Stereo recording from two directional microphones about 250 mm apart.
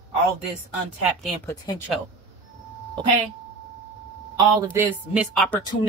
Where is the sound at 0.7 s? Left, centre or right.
Centre.